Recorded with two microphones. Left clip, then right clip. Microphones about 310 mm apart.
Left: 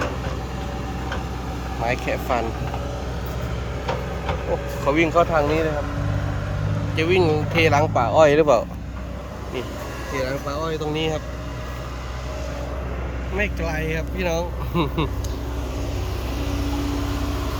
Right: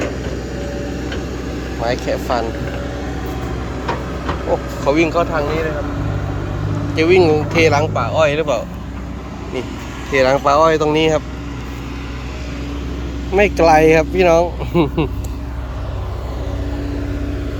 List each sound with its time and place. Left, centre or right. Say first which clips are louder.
1.8 s speech: right 5 dB; centre
4.9 s speech: right 3 dB; centre
6.9 s speech: right 7 dB; centre
10.2 s speech: right 15 dB; centre
13.6 s speech: right 17 dB; right
14.3 s speech: right 10 dB; centre
16.8 s vehicle: right 2 dB; left